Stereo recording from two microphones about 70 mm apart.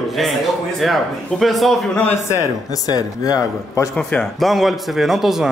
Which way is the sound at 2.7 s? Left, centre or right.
Left.